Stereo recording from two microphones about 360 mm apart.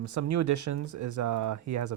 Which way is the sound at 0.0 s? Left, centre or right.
Right.